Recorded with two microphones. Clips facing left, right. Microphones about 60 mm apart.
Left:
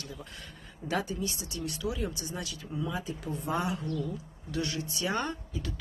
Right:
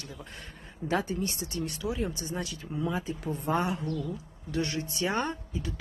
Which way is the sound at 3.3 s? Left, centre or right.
Right.